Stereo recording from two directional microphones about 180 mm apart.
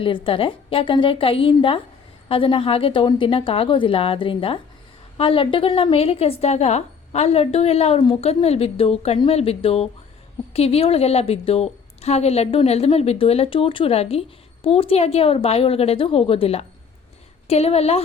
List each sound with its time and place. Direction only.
0.0 s a woman's voice: 30° left (ahead or behind)